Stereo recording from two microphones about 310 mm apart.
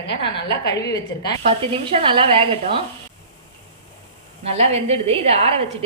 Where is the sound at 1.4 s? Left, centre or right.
Centre.